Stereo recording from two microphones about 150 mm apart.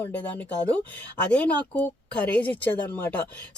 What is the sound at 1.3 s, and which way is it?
Speech, 10° left (ahead or behind).